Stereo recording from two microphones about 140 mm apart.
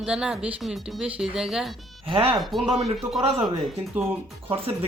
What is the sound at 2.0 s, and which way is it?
Speech, 40° right (ahead or behind).